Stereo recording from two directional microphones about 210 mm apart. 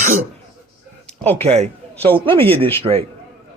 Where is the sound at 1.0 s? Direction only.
10° left (ahead or behind).